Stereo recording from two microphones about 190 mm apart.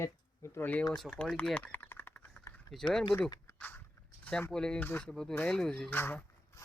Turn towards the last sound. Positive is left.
turn(degrees=10)  # may be behind; listen again after turning